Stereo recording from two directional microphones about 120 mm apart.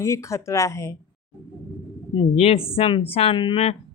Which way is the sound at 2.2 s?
55° left (ahead or behind).